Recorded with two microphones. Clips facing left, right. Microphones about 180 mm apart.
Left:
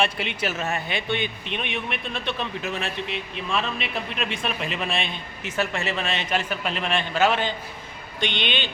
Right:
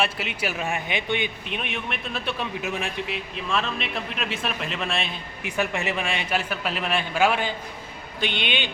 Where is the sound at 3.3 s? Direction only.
Centre (ahead or behind).